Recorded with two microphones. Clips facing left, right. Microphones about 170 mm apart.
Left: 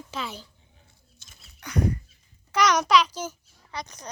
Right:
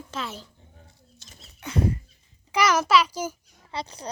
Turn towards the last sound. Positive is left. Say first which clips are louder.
# right 3 dB
turn(degrees=-30)  # may be behind; listen again after turning